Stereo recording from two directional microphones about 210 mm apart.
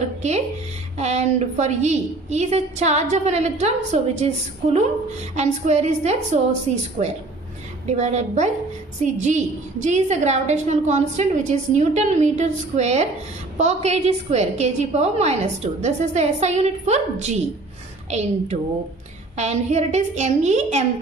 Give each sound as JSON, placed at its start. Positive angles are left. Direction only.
{"t": 0.2, "sound": "a woman's voice", "side_deg": -30}
{"t": 5.4, "sound": "a woman's voice", "side_deg": -30}
{"t": 7.9, "sound": "a woman's voice", "side_deg": -35}